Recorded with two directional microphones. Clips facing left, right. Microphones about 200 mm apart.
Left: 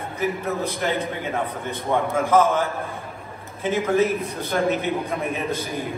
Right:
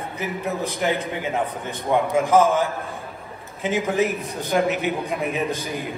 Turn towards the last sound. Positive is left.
turn(degrees=-15)  # may be behind; listen again after turning